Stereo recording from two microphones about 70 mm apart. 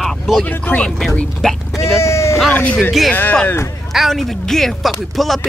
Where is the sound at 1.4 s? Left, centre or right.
Centre.